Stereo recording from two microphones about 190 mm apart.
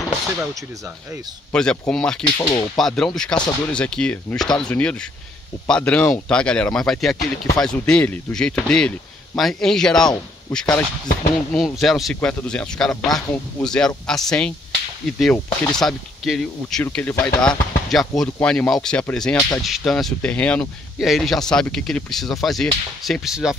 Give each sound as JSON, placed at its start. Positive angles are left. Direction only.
{"t": 1.5, "sound": "speech", "side_deg": 5}
{"t": 2.3, "sound": "speech", "side_deg": 20}
{"t": 2.8, "sound": "speech", "side_deg": 0}